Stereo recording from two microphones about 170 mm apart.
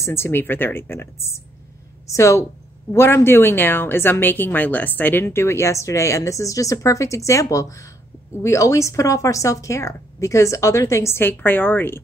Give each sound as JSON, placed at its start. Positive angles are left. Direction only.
{"t": 0.0, "sound": "a woman's voice", "side_deg": 15}